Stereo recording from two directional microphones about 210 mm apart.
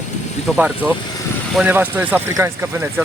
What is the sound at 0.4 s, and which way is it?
Speech, 5° right (ahead or behind).